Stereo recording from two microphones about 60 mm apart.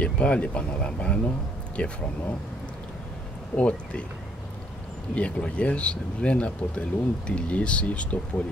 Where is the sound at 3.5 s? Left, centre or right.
Centre.